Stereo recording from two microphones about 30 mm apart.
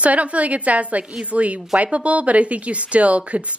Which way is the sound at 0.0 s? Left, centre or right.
Right.